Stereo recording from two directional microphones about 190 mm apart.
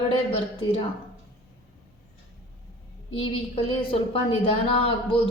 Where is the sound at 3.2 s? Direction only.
30° left (ahead or behind).